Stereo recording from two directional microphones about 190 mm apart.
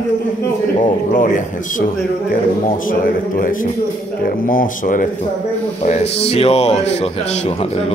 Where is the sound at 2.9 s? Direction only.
45° left (ahead or behind).